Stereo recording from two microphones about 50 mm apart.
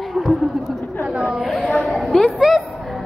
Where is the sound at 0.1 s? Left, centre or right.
Centre.